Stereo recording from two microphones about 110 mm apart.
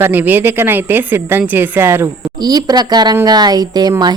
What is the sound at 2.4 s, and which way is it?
Speech, 35° right (ahead or behind).